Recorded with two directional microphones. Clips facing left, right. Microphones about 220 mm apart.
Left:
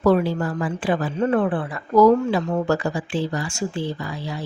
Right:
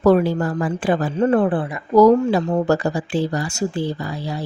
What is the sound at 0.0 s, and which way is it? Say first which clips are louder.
A woman's voice: right 3 dB; 45° right (ahead or behind).